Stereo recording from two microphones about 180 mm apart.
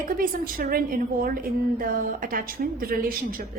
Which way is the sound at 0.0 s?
50° right (ahead or behind).